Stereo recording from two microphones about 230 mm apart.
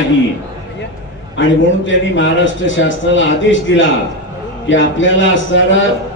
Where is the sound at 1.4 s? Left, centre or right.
Left.